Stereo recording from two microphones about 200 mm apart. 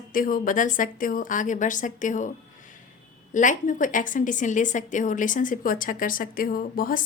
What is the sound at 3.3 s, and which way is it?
A woman's voice, 40° left (ahead or behind).